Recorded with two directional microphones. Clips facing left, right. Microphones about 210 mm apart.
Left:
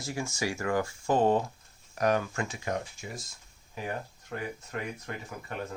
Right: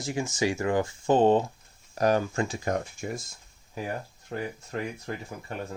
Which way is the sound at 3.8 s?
30° right (ahead or behind).